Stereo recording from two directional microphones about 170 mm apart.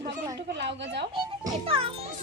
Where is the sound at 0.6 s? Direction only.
90° right.